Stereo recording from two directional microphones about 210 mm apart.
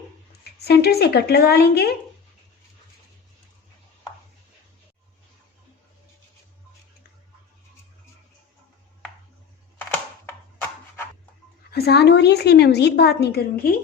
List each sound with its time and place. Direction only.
0.4 s a woman's voice: 50° left (ahead or behind)
9.9 s a sound: 10° left (ahead or behind)
11.7 s a woman's voice: 50° left (ahead or behind)